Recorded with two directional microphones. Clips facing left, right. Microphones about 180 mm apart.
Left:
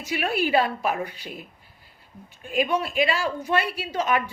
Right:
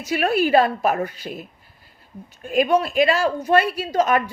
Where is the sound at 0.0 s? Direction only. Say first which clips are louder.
Right 5 dB; 40° right (ahead or behind).